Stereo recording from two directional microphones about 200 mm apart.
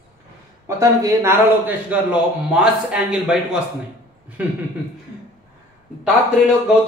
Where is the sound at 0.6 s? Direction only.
15° right (ahead or behind).